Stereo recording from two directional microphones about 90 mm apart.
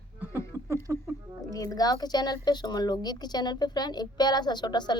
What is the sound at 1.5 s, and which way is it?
A woman's voice, 40° left (ahead or behind).